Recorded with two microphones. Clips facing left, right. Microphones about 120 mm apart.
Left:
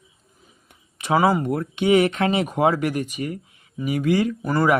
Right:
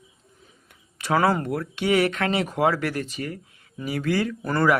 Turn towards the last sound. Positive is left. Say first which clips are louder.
# left 3 dB
turn(degrees=5)  # may be behind; listen again after turning